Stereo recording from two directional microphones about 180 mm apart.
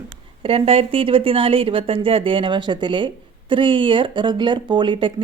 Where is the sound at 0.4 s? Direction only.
30° right (ahead or behind).